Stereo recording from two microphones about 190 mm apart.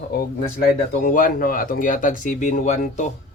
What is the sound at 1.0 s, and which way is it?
Speech, 45° left (ahead or behind).